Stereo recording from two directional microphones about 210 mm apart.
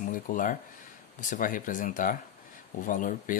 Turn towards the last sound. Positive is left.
turn(degrees=40)  # may be behind; listen again after turning